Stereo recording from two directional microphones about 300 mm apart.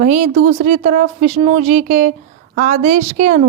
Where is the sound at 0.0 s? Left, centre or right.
Right.